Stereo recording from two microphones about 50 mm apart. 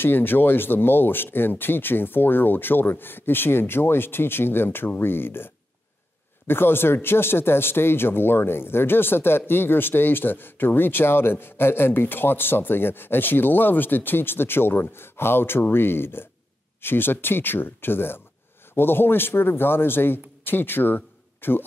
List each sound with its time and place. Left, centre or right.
0.0 s speech: left